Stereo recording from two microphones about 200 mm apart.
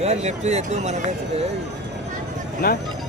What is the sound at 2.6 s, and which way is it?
Speech, 45° left (ahead or behind).